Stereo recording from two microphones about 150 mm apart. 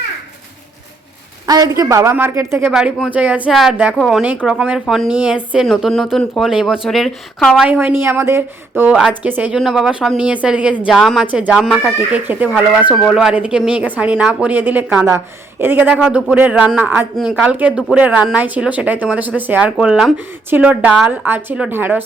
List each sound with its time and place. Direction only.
1.5 s a woman's voice: 25° right (ahead or behind)
2.7 s speech: 5° right (ahead or behind)
12.9 s speech: 5° left (ahead or behind)
13.1 s speech: 5° right (ahead or behind)